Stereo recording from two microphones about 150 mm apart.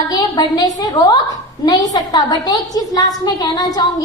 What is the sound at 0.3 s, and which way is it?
A woman's voice, 25° left (ahead or behind).